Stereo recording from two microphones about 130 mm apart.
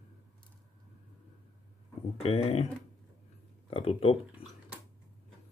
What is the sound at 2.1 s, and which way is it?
Speech, 50° left (ahead or behind).